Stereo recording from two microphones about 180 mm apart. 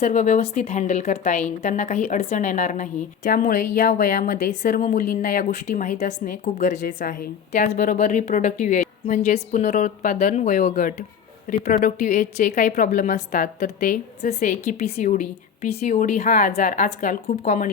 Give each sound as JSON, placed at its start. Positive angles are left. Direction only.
{"t": 0.0, "sound": "speech", "side_deg": 40}